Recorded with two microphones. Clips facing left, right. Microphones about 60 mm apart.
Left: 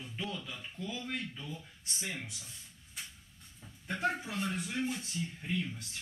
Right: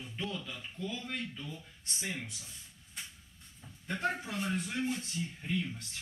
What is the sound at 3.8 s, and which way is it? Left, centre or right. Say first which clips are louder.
Speech: left 1 dB; centre.